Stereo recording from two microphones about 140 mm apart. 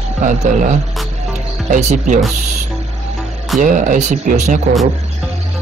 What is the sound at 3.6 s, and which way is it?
Speech, 65° right (ahead or behind).